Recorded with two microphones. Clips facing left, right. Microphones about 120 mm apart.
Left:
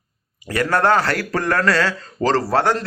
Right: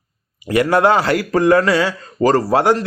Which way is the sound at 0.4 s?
15° right (ahead or behind).